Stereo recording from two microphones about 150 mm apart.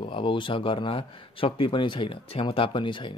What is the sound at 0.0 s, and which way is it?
Speech, 35° left (ahead or behind).